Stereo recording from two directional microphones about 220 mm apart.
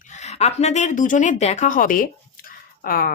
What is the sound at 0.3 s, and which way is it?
A woman's voice, 30° left (ahead or behind).